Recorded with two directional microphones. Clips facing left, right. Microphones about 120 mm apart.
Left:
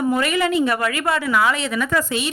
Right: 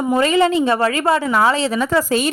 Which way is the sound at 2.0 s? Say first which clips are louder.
Right 6 dB; 40° right (ahead or behind).